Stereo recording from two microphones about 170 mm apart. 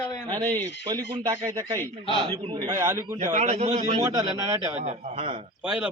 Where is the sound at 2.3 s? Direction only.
35° right (ahead or behind).